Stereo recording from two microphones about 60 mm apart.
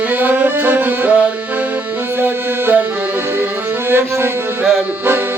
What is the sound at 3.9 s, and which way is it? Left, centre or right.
Music, right.